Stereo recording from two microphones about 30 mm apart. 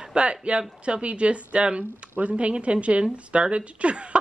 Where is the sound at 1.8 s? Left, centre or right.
Right.